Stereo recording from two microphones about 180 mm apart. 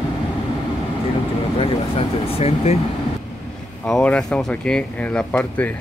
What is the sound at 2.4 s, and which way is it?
Speech, 35° left (ahead or behind).